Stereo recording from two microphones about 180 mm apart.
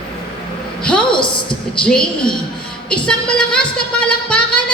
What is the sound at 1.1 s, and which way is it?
Speech, 25° left (ahead or behind).